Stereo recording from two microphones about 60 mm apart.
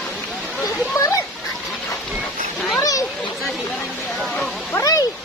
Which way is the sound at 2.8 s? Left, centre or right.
Left.